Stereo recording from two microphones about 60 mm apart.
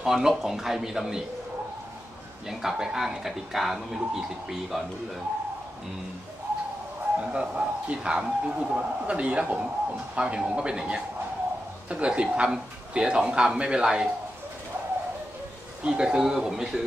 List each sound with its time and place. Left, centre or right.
0.0 s speech: centre
2.4 s speech: centre
7.2 s a man's voice: centre
15.8 s speech: centre